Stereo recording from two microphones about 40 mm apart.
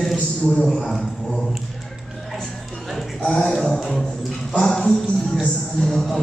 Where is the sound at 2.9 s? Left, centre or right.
Centre.